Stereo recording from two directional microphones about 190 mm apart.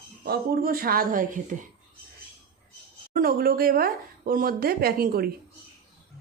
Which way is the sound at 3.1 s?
50° right (ahead or behind).